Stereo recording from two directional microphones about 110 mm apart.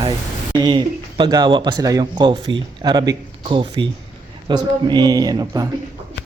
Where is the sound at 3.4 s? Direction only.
50° right (ahead or behind).